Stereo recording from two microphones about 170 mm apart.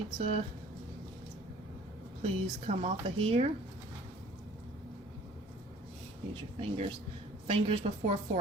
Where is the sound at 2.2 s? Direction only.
35° right (ahead or behind).